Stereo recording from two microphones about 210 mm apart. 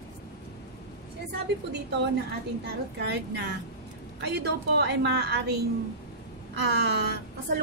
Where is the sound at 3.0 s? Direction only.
50° right (ahead or behind).